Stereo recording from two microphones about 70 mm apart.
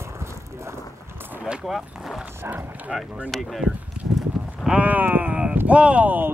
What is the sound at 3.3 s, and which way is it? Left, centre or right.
Speech, centre.